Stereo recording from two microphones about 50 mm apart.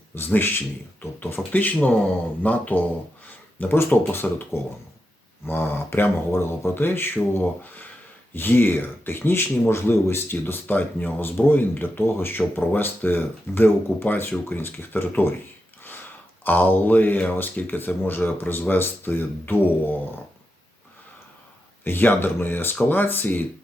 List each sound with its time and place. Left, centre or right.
0.1 s speech: left
3.6 s speech: left
10.4 s speech: left
16.4 s speech: left
21.8 s speech: left